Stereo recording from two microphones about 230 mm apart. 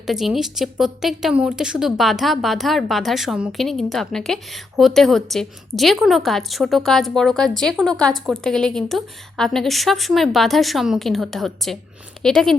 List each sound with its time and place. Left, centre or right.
0.0 s a woman's voice: centre